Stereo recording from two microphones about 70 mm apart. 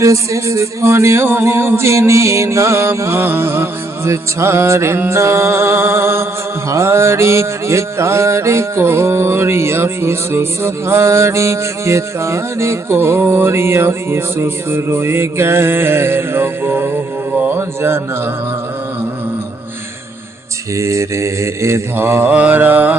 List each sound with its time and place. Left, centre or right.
0.0 s mantra: right
17.3 s music: right
17.6 s music: right
20.7 s mantra: right
21.9 s mantra: right